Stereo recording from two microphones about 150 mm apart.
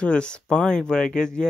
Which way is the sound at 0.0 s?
5° left (ahead or behind).